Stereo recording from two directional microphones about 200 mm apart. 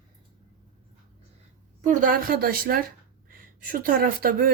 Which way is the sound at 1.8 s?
40° right (ahead or behind).